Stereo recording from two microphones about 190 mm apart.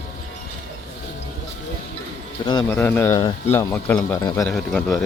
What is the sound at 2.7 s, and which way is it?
Speech, 10° left (ahead or behind).